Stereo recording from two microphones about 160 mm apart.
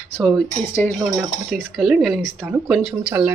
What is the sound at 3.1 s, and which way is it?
Speech, 20° right (ahead or behind).